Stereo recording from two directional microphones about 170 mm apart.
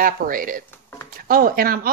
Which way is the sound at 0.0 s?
55° right (ahead or behind).